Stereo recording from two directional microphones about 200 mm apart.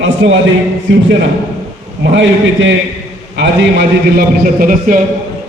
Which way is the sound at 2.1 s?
65° right (ahead or behind).